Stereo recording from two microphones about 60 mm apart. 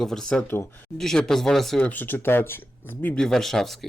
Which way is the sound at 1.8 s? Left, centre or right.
Left.